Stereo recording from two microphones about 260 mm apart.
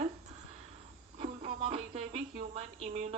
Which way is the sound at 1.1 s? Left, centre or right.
Right.